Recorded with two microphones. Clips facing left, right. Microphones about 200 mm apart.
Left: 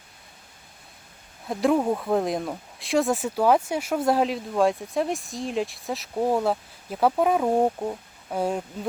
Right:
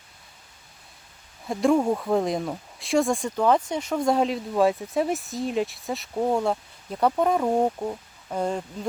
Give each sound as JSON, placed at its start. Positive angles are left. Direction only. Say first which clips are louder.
{"t": 1.5, "sound": "speech", "louder": "right 1 dB", "side_deg": 0}